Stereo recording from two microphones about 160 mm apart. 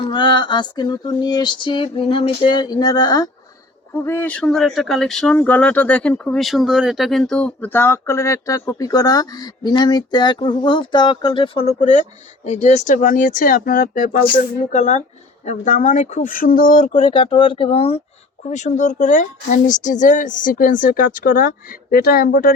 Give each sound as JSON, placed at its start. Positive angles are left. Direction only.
{"t": 0.1, "sound": "a sound", "side_deg": 30}
{"t": 4.0, "sound": "speech", "side_deg": 10}
{"t": 11.8, "sound": "speech", "side_deg": 50}
{"t": 16.9, "sound": "speech", "side_deg": 35}
{"t": 18.4, "sound": "speech", "side_deg": 45}